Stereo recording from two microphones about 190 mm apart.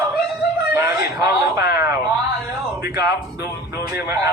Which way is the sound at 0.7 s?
15° right (ahead or behind).